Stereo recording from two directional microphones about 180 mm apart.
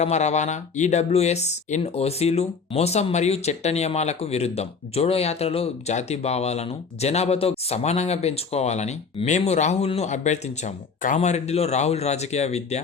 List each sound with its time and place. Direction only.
0.0 s speech: 40° left (ahead or behind)